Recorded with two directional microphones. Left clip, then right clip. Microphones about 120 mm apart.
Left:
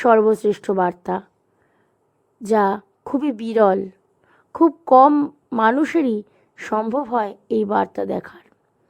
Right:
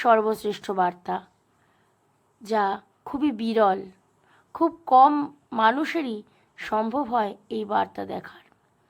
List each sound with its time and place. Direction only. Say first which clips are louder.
0.0 s a woman's voice: left 6 dB; 35° left (ahead or behind)
2.4 s a woman's voice: left 6 dB; 55° left (ahead or behind)
3.1 s a woman's voice: left 4 dB; 40° left (ahead or behind)
4.9 s a woman's voice: left 4 dB; 50° left (ahead or behind)
5.1 s speech: left 7 dB; 30° left (ahead or behind)
5.7 s a woman's voice: left 8 dB; 40° left (ahead or behind)